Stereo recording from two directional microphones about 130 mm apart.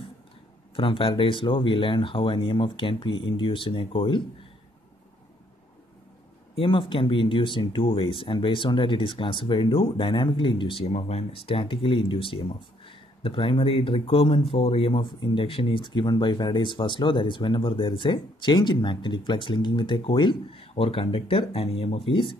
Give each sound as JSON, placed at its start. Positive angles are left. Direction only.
{"t": 0.7, "sound": "speech", "side_deg": 45}
{"t": 6.5, "sound": "speech", "side_deg": 45}